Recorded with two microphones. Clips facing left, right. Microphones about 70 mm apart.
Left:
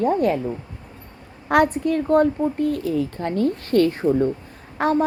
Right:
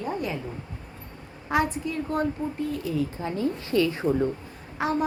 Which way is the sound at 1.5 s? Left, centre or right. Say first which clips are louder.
Left 8 dB; left.